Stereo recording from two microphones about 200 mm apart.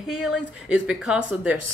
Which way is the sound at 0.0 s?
Centre (ahead or behind).